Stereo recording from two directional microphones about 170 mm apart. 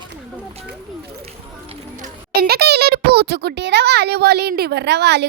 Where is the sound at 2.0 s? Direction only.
65° right (ahead or behind).